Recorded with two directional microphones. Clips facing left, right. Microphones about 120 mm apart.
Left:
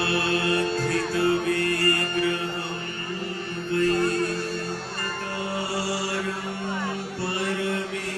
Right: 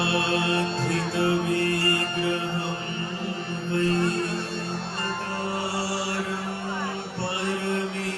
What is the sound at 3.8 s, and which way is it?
Music, 25° right (ahead or behind).